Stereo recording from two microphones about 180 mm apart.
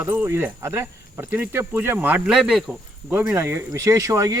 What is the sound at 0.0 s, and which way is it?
Speech, 10° right (ahead or behind).